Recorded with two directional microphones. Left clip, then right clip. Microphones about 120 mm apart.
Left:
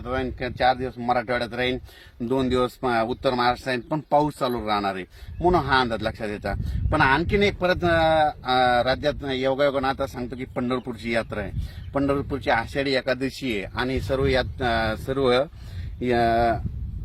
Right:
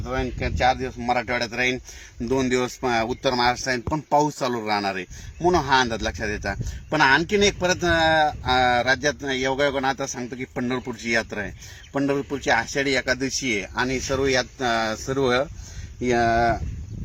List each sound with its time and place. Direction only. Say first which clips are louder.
0.4 s speech: even; 5° right (ahead or behind)
14.6 s speech: right 1 dB; 45° left (ahead or behind)
14.9 s speech: even; centre (ahead or behind)
16.0 s speech: right 1 dB; 45° left (ahead or behind)